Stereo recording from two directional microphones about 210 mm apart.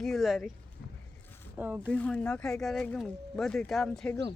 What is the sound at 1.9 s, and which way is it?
Speech, 5° left (ahead or behind).